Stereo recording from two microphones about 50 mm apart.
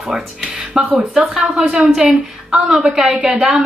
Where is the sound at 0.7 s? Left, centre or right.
Centre.